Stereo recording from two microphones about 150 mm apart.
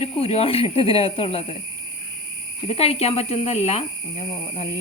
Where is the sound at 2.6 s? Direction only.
40° left (ahead or behind).